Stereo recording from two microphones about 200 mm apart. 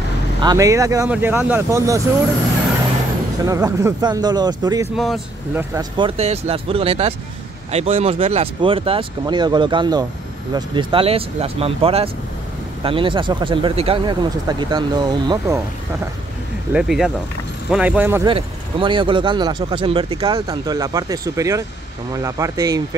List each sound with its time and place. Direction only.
0.4 s speech: 20° right (ahead or behind)
3.4 s speech: 15° right (ahead or behind)
4.9 s speech: centre (ahead or behind)
5.9 s speech: 30° right (ahead or behind)
16.7 s speech: centre (ahead or behind)
18.3 s speech: 25° right (ahead or behind)